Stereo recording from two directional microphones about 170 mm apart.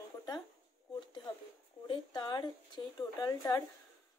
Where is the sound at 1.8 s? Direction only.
25° left (ahead or behind).